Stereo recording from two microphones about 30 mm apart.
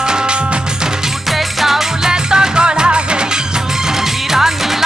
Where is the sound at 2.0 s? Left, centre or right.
Right.